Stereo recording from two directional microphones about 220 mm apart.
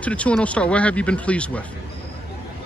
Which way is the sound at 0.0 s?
5° left (ahead or behind).